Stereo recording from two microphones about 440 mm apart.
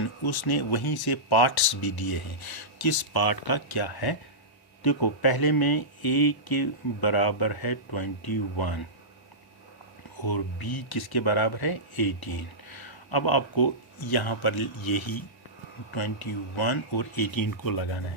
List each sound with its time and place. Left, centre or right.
0.7 s speech: left
10.2 s speech: left
14.2 s speech: left
14.8 s speech: left
16.2 s speech: left
16.9 s speech: left
17.7 s speech: left